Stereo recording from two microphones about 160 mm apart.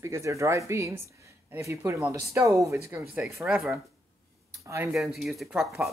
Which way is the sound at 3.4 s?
Centre (ahead or behind).